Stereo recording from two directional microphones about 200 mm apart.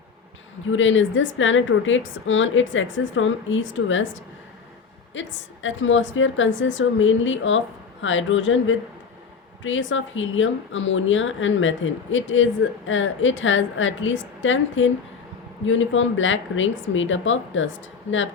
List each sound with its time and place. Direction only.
0.7 s a woman's voice: 70° left (ahead or behind)